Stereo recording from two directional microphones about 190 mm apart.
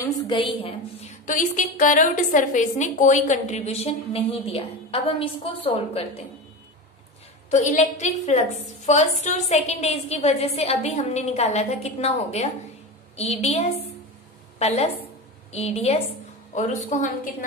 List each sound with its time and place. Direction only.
0.0 s a woman's voice: 25° left (ahead or behind)
1.2 s a woman's voice: 45° left (ahead or behind)
7.5 s a woman's voice: 40° left (ahead or behind)